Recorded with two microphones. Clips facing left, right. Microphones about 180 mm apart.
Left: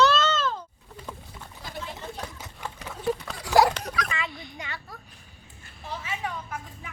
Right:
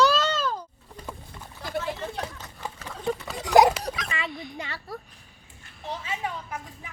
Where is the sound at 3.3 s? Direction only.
20° right (ahead or behind).